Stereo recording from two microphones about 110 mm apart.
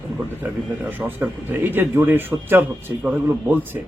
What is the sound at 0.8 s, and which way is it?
Speech, 15° right (ahead or behind).